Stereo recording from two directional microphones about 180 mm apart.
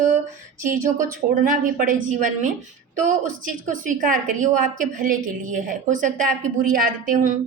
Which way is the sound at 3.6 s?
45° right (ahead or behind).